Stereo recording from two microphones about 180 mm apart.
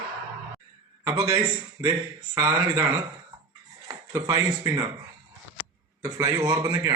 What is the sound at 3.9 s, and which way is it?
Speech, 15° right (ahead or behind).